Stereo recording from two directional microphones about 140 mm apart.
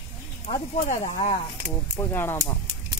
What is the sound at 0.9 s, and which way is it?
Speech, 45° left (ahead or behind).